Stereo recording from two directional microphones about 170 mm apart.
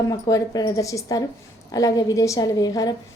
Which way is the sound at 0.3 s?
20° left (ahead or behind).